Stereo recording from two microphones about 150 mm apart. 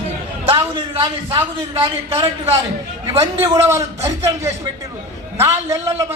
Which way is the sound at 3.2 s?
20° right (ahead or behind).